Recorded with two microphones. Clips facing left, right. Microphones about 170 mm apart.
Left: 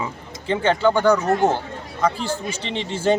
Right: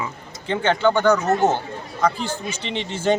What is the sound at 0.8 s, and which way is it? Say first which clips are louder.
Speech: even; 10° left (ahead or behind).